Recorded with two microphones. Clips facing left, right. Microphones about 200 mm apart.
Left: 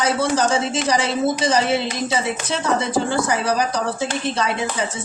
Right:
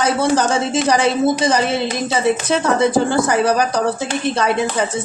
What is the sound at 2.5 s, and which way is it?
Speech, 55° right (ahead or behind).